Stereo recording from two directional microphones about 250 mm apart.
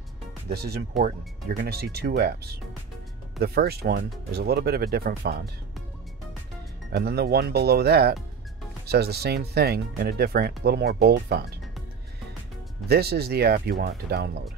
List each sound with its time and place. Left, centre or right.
0.5 s speech: right
7.0 s speech: right
12.8 s speech: right